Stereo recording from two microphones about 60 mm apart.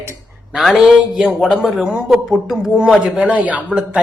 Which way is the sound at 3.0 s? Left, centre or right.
Right.